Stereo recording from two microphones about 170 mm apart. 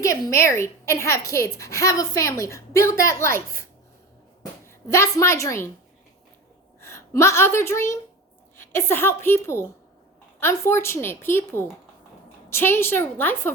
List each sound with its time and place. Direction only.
0.0 s a woman's voice: 20° left (ahead or behind)
4.6 s a woman's voice: 15° left (ahead or behind)
6.8 s a woman's voice: 15° left (ahead or behind)